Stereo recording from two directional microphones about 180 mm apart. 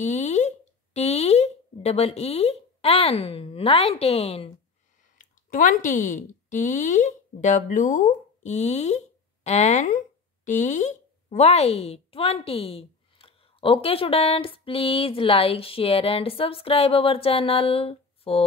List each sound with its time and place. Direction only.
0.0 s speech: 40° left (ahead or behind)
5.5 s speech: 45° left (ahead or behind)